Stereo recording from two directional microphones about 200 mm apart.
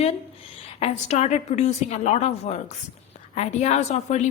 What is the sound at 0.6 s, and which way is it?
A woman's voice, 30° left (ahead or behind).